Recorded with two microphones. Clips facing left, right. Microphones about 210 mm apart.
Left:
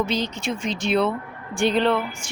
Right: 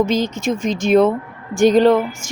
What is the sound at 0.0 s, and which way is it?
Speech, 45° right (ahead or behind).